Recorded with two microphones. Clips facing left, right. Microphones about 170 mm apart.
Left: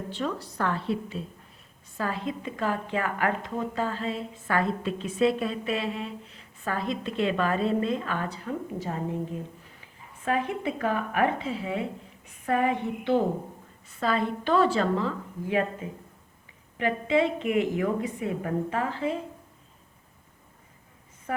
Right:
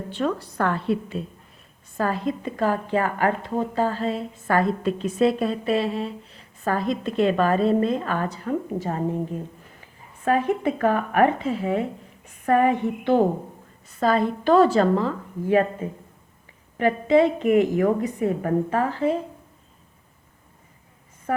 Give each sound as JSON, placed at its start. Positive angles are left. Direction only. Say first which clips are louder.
{"t": 0.1, "sound": "a woman's voice", "louder": "right 8 dB", "side_deg": -55}
{"t": 2.0, "sound": "a woman's voice", "louder": "right 6 dB", "side_deg": -45}
{"t": 10.2, "sound": "a woman's voice", "louder": "right 6 dB", "side_deg": -45}
{"t": 21.3, "sound": "a woman's voice", "louder": "right 6 dB", "side_deg": -45}